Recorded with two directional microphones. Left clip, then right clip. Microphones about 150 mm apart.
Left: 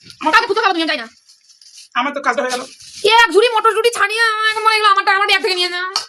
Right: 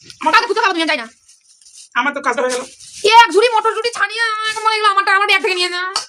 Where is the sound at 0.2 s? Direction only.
15° right (ahead or behind).